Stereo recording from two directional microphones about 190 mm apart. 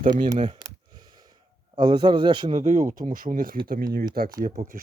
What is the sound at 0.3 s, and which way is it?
Speech, 35° right (ahead or behind).